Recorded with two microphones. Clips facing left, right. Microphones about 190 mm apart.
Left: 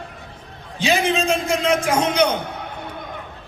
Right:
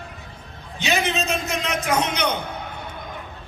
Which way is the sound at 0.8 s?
30° left (ahead or behind).